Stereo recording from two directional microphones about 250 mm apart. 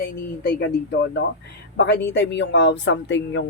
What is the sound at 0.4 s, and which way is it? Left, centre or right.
Speech, left.